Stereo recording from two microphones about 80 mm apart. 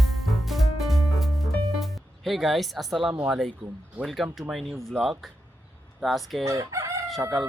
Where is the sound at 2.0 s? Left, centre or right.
Centre.